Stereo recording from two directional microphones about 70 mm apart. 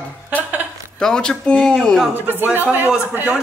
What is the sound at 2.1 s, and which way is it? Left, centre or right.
Speech, right.